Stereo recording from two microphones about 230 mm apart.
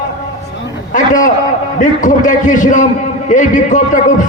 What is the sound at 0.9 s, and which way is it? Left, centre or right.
A man's voice, left.